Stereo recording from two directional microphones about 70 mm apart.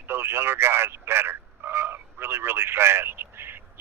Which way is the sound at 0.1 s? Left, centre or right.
Right.